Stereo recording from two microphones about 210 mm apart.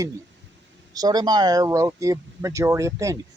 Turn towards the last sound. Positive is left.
turn(degrees=-15)  # may be behind; listen again after turning